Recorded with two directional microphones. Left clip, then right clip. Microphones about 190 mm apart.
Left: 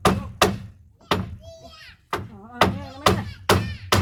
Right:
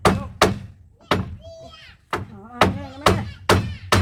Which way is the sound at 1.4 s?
35° left (ahead or behind).